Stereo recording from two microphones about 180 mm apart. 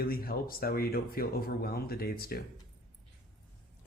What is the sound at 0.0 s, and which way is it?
Speech, 55° left (ahead or behind).